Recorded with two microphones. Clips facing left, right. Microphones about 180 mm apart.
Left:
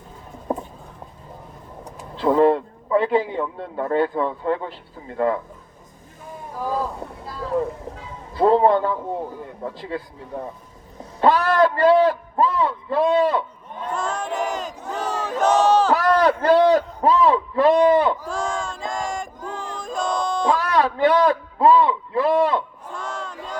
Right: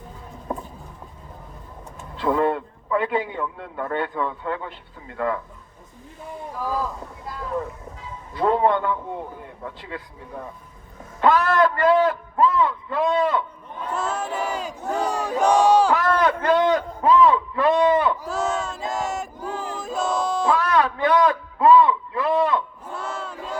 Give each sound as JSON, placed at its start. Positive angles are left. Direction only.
{"t": 0.5, "sound": "a sound", "side_deg": 30}
{"t": 2.0, "sound": "a man's voice", "side_deg": 30}
{"t": 6.6, "sound": "speech", "side_deg": 30}
{"t": 8.3, "sound": "a man's voice", "side_deg": 35}
{"t": 13.9, "sound": "battle cry", "side_deg": -5}
{"t": 16.0, "sound": "a man's voice", "side_deg": 35}
{"t": 18.3, "sound": "a sound", "side_deg": -5}
{"t": 20.6, "sound": "a man's voice", "side_deg": 30}
{"t": 22.9, "sound": "battle cry", "side_deg": -5}